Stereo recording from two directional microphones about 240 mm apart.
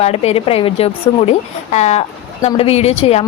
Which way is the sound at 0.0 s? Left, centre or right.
Left.